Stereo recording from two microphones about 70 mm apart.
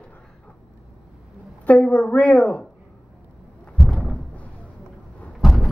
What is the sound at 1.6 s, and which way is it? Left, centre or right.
Speech, left.